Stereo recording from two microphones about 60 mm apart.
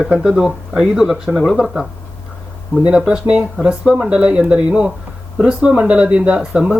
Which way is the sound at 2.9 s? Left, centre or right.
Centre.